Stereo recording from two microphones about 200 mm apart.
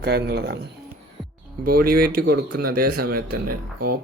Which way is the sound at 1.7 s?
50° right (ahead or behind).